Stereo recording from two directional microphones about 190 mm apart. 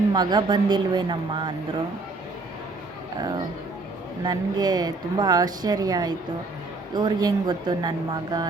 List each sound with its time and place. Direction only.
0.1 s speech: 20° right (ahead or behind)
3.2 s speech: 20° right (ahead or behind)